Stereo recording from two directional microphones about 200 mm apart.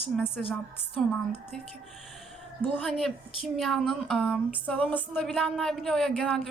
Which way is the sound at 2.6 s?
5° left (ahead or behind).